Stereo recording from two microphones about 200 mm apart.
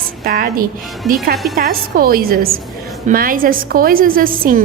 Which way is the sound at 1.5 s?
45° right (ahead or behind).